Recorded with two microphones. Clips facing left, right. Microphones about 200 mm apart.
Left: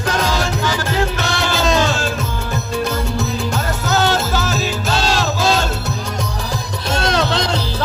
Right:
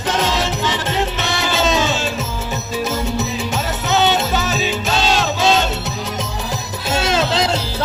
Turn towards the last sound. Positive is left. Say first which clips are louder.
# right 1 dB
turn(degrees=-5)  # may be behind; listen again after turning